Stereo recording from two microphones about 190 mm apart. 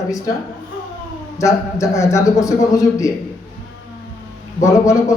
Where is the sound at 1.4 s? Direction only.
15° left (ahead or behind).